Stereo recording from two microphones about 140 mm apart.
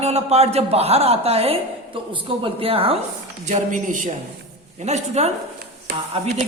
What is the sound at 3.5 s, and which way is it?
Speech, 60° right (ahead or behind).